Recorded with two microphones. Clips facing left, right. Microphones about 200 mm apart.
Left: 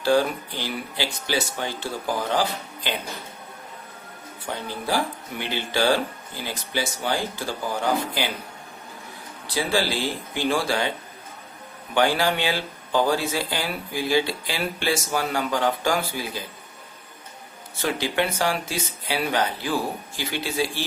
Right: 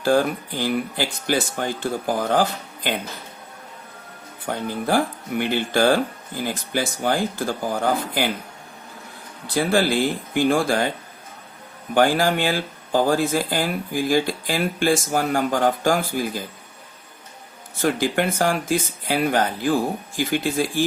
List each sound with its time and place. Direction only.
0.0 s speech: 50° right (ahead or behind)
4.4 s speech: 50° right (ahead or behind)
9.6 s speech: 50° right (ahead or behind)
11.9 s speech: 45° right (ahead or behind)
17.7 s speech: 50° right (ahead or behind)